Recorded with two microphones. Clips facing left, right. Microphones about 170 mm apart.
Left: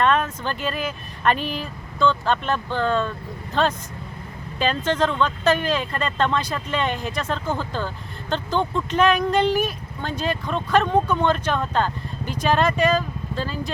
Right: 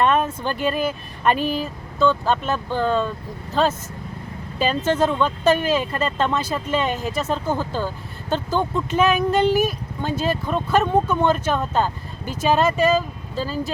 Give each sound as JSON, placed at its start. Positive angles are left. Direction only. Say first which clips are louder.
{"t": 0.0, "sound": "speech", "louder": "right 2 dB", "side_deg": -10}
{"t": 1.4, "sound": "speech", "louder": "right 5 dB", "side_deg": -45}
{"t": 2.0, "sound": "speech", "louder": "right 2 dB", "side_deg": -10}